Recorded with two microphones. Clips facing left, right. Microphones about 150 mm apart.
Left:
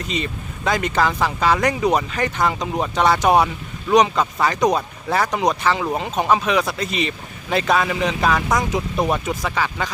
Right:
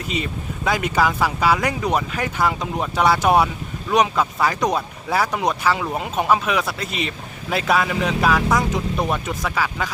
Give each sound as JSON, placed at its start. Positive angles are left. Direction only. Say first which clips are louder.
{"t": 0.1, "sound": "speech", "louder": "right 2 dB", "side_deg": -5}